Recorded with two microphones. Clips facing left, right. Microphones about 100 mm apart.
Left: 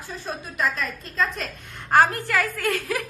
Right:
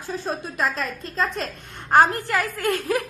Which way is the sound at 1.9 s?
20° right (ahead or behind).